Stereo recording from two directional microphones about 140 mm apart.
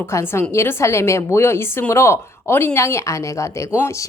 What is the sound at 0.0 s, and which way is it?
A woman's voice, 20° left (ahead or behind).